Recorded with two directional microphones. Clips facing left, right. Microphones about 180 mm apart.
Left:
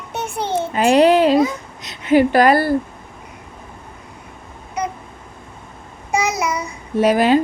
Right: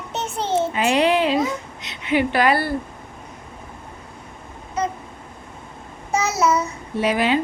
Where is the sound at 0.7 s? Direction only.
40° left (ahead or behind).